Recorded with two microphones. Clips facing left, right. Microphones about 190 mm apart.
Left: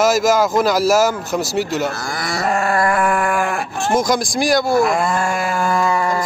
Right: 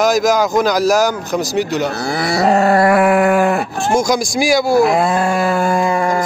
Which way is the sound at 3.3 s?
40° right (ahead or behind).